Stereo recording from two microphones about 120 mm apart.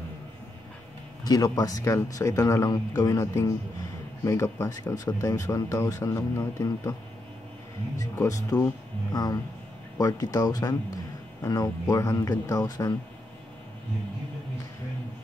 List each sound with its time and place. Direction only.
1.2 s speech: 30° left (ahead or behind)
8.0 s speech: 30° left (ahead or behind)